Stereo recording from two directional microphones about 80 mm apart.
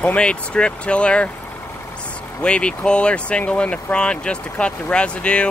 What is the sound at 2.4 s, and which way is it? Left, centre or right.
Speech, centre.